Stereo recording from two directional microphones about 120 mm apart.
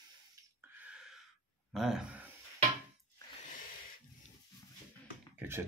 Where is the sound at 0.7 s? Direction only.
10° right (ahead or behind).